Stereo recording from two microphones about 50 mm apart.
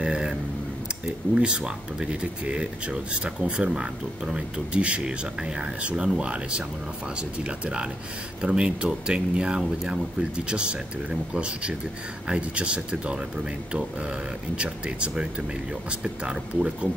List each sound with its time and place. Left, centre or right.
0.0 s a sound: centre
1.0 s speech: centre
14.6 s speech: right